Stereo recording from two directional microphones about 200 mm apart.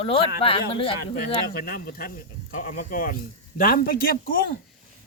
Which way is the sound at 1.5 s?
45° left (ahead or behind).